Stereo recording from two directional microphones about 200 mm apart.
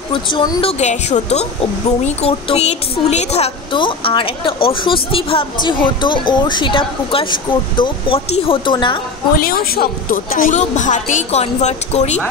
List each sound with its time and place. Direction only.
0.1 s a woman's voice: 20° left (ahead or behind)
9.4 s a woman's voice: 50° left (ahead or behind)